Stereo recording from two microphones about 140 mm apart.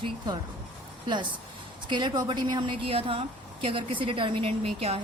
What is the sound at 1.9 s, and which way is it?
A woman's voice, 35° right (ahead or behind).